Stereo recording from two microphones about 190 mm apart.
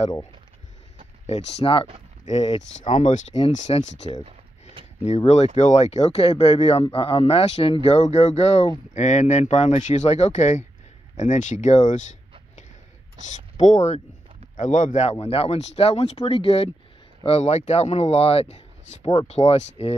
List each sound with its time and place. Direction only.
1.2 s a man's voice: 35° left (ahead or behind)
5.0 s a man's voice: 35° left (ahead or behind)